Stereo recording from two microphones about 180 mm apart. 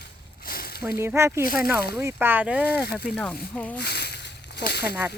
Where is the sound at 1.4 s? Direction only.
55° left (ahead or behind).